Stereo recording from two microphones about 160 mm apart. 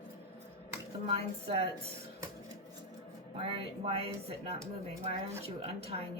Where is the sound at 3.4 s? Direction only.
40° right (ahead or behind).